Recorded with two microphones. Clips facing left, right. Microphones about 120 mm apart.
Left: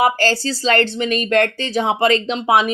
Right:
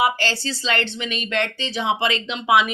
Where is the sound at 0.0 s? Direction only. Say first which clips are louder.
Left 5 dB; 45° left (ahead or behind).